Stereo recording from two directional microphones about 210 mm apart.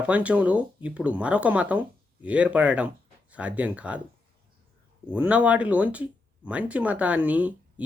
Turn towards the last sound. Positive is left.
turn(degrees=-5)  # may be behind; listen again after turning